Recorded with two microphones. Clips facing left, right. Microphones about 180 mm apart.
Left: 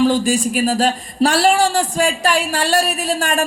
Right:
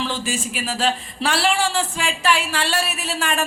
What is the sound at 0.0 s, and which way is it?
Speech, 40° left (ahead or behind).